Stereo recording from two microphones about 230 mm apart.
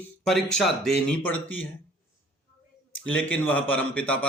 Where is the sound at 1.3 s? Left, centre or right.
Left.